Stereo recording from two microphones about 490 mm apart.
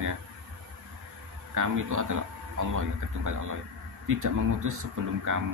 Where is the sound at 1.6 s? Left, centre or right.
Right.